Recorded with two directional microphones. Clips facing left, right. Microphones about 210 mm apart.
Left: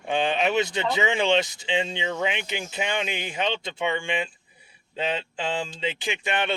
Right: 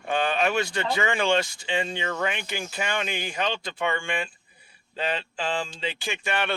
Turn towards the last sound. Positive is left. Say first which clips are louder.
# left 1 dB
turn(degrees=20)  # may be behind; listen again after turning